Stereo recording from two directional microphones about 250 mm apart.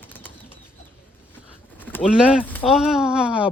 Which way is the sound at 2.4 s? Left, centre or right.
Centre.